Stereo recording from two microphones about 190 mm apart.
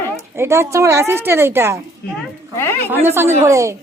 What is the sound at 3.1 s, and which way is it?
Speech, 15° right (ahead or behind).